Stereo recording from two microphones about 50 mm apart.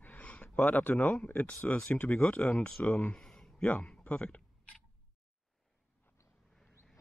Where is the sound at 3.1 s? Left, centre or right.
Centre.